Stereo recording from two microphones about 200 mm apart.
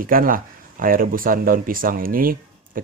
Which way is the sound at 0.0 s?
45° right (ahead or behind).